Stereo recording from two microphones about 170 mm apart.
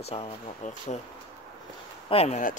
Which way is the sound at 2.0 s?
35° left (ahead or behind).